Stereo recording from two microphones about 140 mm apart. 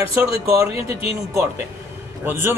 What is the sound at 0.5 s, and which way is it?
Speech, 20° right (ahead or behind).